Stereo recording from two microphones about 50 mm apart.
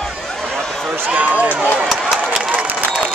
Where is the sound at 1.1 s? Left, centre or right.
Right.